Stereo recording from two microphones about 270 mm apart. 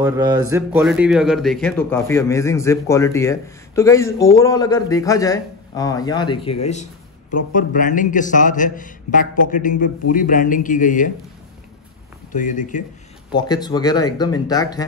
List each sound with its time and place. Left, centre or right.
0.0 s a man's voice: centre; by 11.1 s left
12.3 s a man's voice: left
13.3 s speech: centre